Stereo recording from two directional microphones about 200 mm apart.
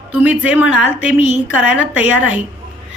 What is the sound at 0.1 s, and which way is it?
A woman's voice, 10° right (ahead or behind).